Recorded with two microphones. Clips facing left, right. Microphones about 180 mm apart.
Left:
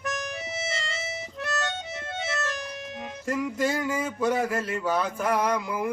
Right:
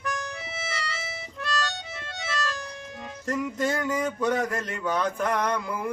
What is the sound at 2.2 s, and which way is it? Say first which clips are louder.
Music: even; 20° left (ahead or behind).